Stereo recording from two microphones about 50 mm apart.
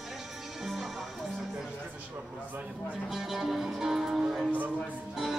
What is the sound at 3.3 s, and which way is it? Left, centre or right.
Music, centre.